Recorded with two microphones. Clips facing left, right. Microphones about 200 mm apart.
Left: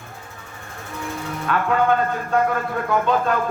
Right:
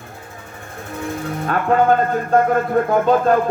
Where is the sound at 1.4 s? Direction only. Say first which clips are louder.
Right 4 dB; 40° right (ahead or behind).